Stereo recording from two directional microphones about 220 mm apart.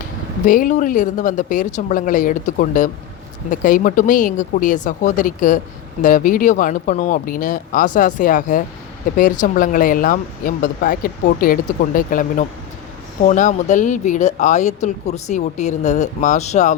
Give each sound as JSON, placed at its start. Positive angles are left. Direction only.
{"t": 0.4, "sound": "speech", "side_deg": 40}